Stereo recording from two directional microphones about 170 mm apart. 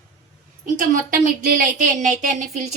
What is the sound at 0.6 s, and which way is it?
A woman's voice, 50° right (ahead or behind).